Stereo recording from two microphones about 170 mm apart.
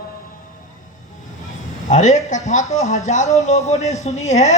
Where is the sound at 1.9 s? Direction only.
45° left (ahead or behind).